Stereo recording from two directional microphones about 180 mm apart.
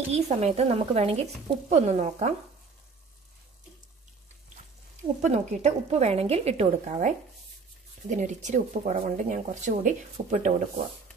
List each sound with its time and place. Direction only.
0.1 s speech: 35° right (ahead or behind)
5.0 s speech: 40° right (ahead or behind)